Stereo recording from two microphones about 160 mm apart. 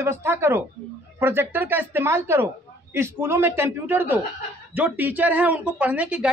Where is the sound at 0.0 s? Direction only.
15° right (ahead or behind).